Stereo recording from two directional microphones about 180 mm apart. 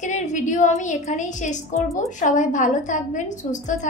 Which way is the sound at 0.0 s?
40° left (ahead or behind).